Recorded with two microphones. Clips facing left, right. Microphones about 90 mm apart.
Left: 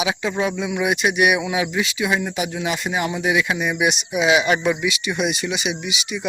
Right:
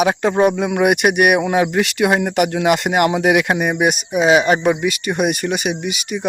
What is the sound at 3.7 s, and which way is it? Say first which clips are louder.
Speech: right 4 dB; 45° right (ahead or behind).